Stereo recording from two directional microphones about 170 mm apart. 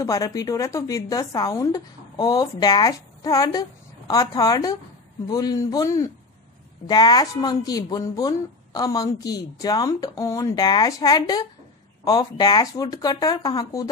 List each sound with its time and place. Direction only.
0.0 s speech: 20° left (ahead or behind)